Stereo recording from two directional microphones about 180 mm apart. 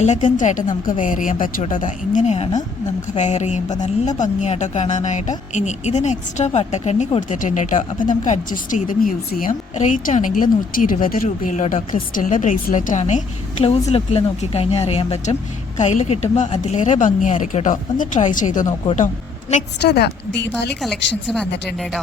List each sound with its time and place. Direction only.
0.0 s a woman's voice: 40° left (ahead or behind)
19.8 s a woman's voice: 65° left (ahead or behind)